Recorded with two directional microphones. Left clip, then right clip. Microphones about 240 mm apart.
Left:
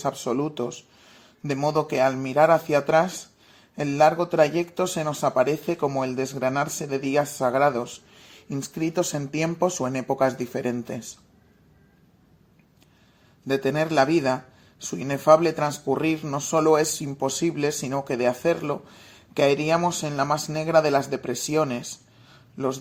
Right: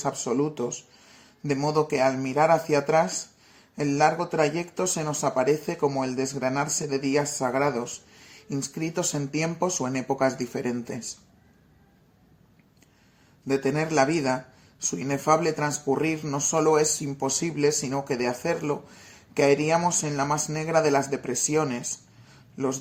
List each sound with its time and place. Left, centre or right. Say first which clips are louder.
0.0 s speech: even; left
13.5 s speech: left 2 dB; left